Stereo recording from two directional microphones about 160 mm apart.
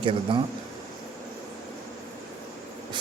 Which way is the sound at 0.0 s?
35° right (ahead or behind).